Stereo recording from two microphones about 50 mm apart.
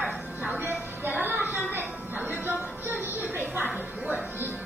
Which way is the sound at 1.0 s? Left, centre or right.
Right.